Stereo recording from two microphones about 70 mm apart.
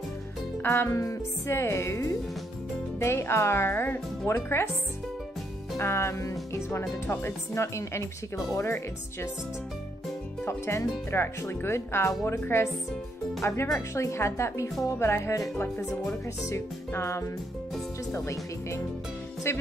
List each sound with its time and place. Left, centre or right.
0.6 s music: left
1.5 s speech: left
5.8 s speech: left
10.4 s speech: left